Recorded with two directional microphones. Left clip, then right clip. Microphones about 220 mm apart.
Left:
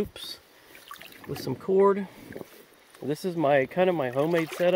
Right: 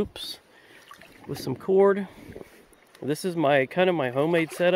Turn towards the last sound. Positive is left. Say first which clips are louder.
# right 2 dB
turn(degrees=-20)  # may be behind; listen again after turning